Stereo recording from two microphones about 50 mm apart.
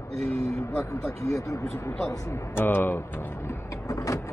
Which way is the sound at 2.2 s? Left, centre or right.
Left.